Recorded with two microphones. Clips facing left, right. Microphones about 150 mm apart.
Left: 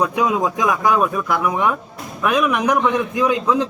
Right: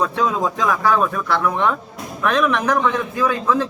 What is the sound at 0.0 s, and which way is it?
A man's voice, 15° left (ahead or behind).